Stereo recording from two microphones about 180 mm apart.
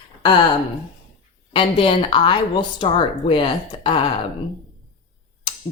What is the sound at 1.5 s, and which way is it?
Speech, 30° left (ahead or behind).